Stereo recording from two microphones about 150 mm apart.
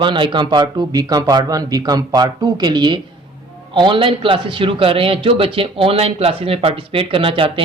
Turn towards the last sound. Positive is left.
turn(degrees=-35)  # may be behind; listen again after turning